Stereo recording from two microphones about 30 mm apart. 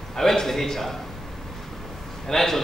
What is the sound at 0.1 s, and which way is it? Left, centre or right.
Speech, centre.